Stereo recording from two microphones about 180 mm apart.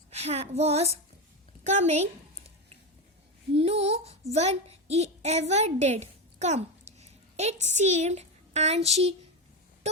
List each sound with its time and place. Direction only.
0.1 s speech: 35° right (ahead or behind)
3.5 s a child's voice: 35° right (ahead or behind)
9.8 s a sound: 40° right (ahead or behind)